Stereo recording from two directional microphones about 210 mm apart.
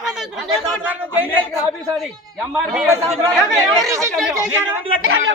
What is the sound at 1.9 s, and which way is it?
A man's voice, centre (ahead or behind).